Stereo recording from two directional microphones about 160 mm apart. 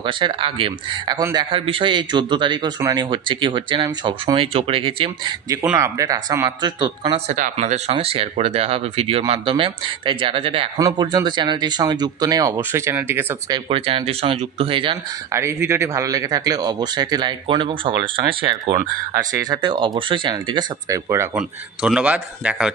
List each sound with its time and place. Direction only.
0.0 s speech: 30° right (ahead or behind)
5.5 s speech: 20° right (ahead or behind); by 7.3 s 35° right (ahead or behind)
7.3 s speech: 50° right (ahead or behind); by 13.4 s 15° right (ahead or behind)
13.5 s speech: 35° right (ahead or behind)
15.3 s speech: 15° right (ahead or behind)
21.4 s a man's voice: 5° right (ahead or behind)